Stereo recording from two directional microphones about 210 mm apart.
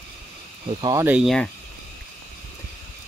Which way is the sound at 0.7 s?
20° right (ahead or behind).